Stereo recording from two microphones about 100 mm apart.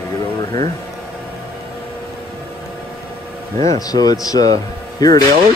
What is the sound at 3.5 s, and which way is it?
Speech, 40° left (ahead or behind).